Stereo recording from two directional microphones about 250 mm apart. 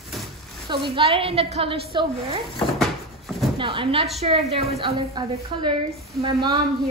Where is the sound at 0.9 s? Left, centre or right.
Right.